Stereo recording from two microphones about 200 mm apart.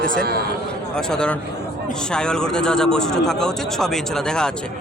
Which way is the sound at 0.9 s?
5° left (ahead or behind).